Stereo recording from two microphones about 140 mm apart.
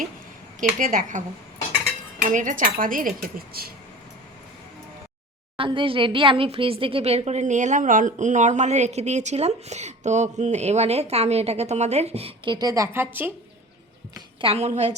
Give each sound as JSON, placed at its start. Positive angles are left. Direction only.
{"t": 0.8, "sound": "a woman's voice", "side_deg": -70}
{"t": 2.3, "sound": "a woman's voice", "side_deg": -65}
{"t": 5.5, "sound": "speech", "side_deg": -40}
{"t": 12.5, "sound": "a woman's voice", "side_deg": -25}
{"t": 14.4, "sound": "speech", "side_deg": -50}